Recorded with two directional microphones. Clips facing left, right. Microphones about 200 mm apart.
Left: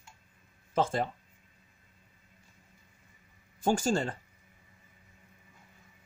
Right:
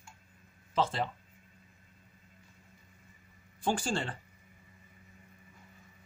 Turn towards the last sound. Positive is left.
turn(degrees=40)  # may be behind; listen again after turning